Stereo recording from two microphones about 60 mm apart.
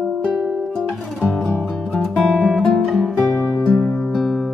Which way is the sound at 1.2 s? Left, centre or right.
Centre.